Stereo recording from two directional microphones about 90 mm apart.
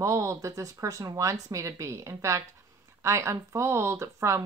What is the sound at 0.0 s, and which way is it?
Speech, 35° right (ahead or behind).